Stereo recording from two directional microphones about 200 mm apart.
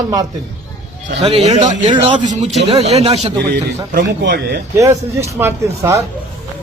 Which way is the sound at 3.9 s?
50° right (ahead or behind).